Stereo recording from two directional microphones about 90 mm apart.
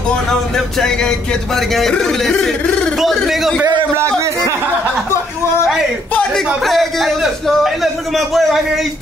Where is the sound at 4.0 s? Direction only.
30° right (ahead or behind).